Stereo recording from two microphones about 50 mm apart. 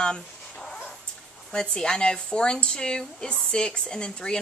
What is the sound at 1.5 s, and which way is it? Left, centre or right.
Speech, centre.